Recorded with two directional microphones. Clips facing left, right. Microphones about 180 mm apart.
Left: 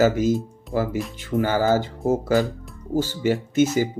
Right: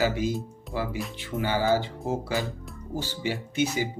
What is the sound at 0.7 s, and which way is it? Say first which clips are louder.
Music: left 8 dB; centre (ahead or behind).